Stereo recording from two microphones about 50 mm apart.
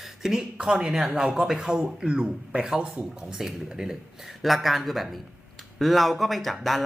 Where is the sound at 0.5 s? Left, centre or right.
Centre.